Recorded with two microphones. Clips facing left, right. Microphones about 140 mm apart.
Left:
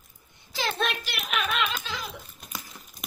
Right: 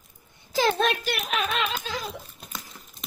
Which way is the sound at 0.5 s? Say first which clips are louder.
Right 6 dB; 45° right (ahead or behind).